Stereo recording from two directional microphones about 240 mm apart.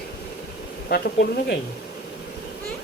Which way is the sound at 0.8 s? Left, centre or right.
Left.